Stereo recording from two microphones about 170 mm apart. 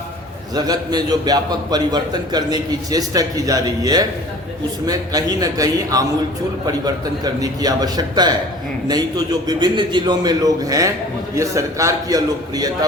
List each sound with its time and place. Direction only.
0.5 s a man's voice: 25° right (ahead or behind)
7.3 s a man's voice: 20° right (ahead or behind)